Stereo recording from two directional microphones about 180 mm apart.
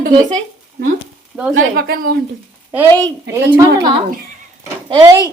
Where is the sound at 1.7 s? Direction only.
55° right (ahead or behind).